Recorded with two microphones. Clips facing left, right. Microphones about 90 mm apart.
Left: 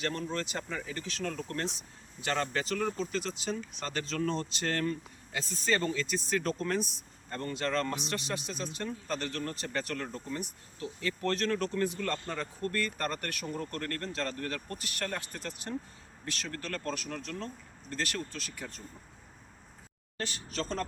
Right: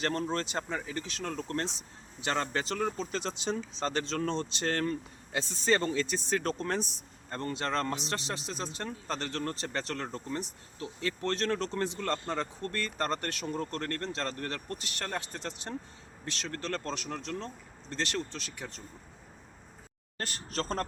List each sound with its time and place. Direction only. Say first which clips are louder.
0.0 s a man's voice: right 3 dB; 35° right (ahead or behind)
20.1 s a man's voice: right 1 dB; 45° right (ahead or behind)